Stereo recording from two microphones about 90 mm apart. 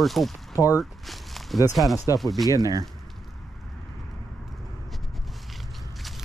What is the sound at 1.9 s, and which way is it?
Speech, 40° left (ahead or behind).